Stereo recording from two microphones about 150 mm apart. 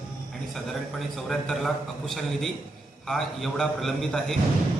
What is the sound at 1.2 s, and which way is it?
A man's voice, centre (ahead or behind).